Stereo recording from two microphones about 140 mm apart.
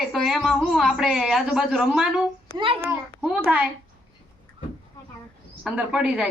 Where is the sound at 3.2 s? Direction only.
10° right (ahead or behind).